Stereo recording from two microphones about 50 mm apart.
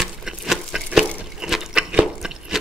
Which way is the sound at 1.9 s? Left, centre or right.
Centre.